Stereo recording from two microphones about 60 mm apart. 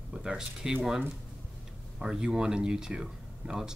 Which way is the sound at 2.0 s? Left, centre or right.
Centre.